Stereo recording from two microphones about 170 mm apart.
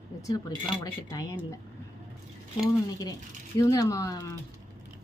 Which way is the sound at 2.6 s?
20° left (ahead or behind).